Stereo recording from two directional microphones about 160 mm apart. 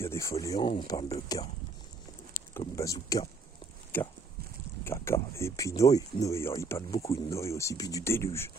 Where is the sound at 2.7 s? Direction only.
20° left (ahead or behind).